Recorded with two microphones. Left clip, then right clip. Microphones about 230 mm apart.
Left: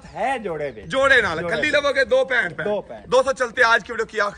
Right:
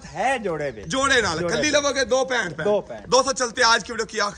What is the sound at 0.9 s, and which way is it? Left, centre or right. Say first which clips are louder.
Speech: left 4 dB; centre.